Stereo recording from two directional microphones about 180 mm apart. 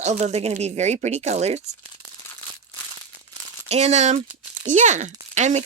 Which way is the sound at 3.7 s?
35° right (ahead or behind).